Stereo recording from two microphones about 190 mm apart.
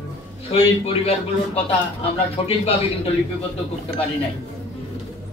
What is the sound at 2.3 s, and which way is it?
Speech, 30° left (ahead or behind).